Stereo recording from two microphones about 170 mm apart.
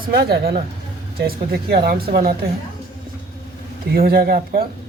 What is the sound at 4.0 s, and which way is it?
Speech, 65° right (ahead or behind).